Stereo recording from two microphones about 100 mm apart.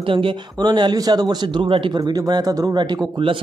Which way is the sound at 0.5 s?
45° right (ahead or behind).